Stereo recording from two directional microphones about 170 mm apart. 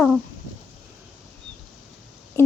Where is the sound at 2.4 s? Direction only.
15° left (ahead or behind).